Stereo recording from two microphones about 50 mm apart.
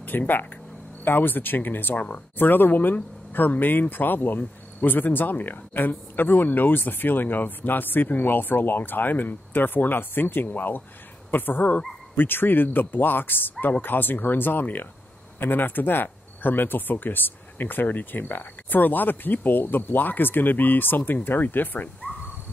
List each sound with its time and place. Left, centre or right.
0.1 s speech: left